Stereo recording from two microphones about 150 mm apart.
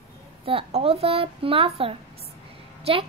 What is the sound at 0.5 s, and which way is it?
A woman's voice, 40° right (ahead or behind).